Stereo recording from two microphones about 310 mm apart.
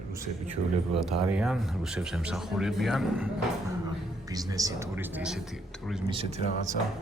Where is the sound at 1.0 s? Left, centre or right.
Centre.